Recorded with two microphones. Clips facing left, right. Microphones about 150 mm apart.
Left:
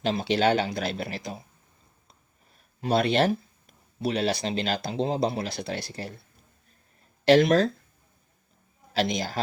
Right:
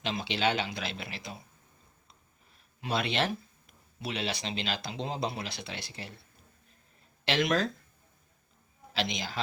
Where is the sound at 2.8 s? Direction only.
40° left (ahead or behind).